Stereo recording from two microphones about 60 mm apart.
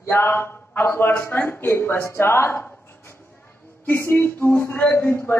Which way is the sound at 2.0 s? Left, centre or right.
Left.